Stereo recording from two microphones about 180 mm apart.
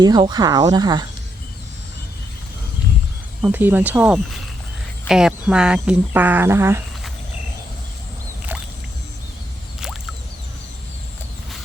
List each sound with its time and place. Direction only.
0.0 s speech: 25° right (ahead or behind)
3.4 s speech: 10° right (ahead or behind)